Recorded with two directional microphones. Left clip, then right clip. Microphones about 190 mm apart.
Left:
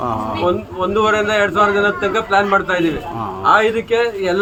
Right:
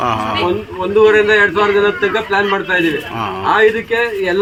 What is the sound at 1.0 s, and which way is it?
A man's voice, 30° left (ahead or behind).